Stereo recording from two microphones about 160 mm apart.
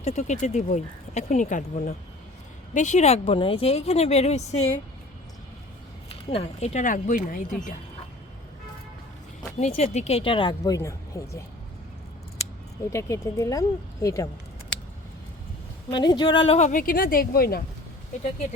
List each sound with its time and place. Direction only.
0.0 s a woman's voice: 50° left (ahead or behind)
6.3 s speech: 45° left (ahead or behind)
9.6 s a woman's voice: 40° left (ahead or behind); by 11.3 s 20° left (ahead or behind)
12.9 s speech: 20° left (ahead or behind)
15.9 s speech: 30° left (ahead or behind)
16.6 s speech: 55° left (ahead or behind); by 17.6 s 70° left (ahead or behind)